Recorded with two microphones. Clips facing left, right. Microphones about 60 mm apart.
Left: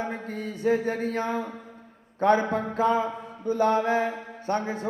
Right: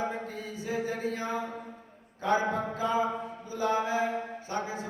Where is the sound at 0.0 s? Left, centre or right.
Left.